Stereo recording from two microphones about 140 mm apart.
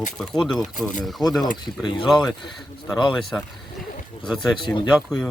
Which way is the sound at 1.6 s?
30° left (ahead or behind).